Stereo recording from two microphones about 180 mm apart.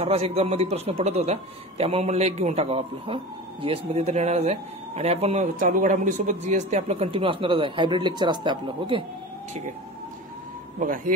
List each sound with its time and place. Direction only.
0.0 s speech: 35° right (ahead or behind)
10.8 s speech: 50° right (ahead or behind)